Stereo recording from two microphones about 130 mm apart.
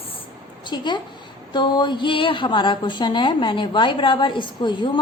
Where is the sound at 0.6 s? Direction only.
35° left (ahead or behind).